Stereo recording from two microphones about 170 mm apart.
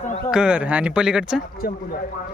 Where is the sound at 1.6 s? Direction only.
65° left (ahead or behind).